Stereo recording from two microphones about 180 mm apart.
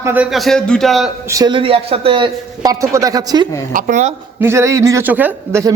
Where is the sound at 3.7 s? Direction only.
45° right (ahead or behind).